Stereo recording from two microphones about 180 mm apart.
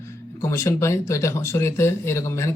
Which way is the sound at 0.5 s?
15° left (ahead or behind).